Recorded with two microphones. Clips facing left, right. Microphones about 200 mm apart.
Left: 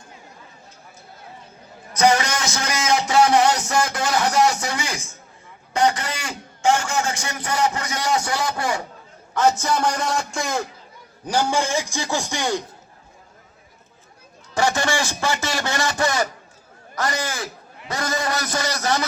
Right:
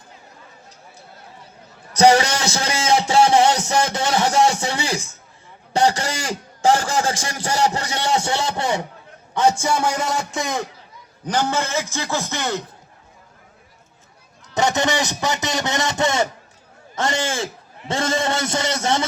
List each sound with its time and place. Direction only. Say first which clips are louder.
2.0 s a man's voice: right 4 dB; 30° right (ahead or behind)
6.0 s a sound: right 4 dB; 30° right (ahead or behind)
7.2 s a man's voice: right 2 dB; 30° right (ahead or behind)
9.3 s a man's voice: right 1 dB; 15° right (ahead or behind)
11.3 s a man's voice: left 1 dB; 10° left (ahead or behind)
14.5 s a man's voice: right 2 dB; 20° right (ahead or behind)